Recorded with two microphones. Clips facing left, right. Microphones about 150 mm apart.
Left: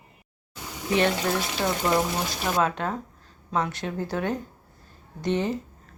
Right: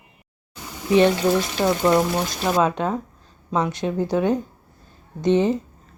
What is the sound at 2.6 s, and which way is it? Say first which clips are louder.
Speech: right 4 dB; 20° right (ahead or behind).